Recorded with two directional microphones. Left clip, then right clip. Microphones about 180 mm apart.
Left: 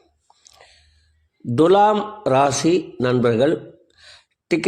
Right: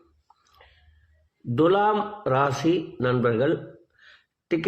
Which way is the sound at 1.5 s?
40° left (ahead or behind).